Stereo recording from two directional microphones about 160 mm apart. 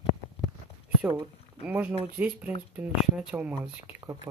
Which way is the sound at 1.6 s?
10° right (ahead or behind).